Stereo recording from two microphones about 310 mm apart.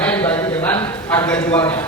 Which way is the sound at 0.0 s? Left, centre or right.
Centre.